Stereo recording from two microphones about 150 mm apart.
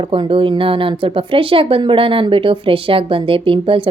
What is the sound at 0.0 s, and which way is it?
Speech, 35° right (ahead or behind).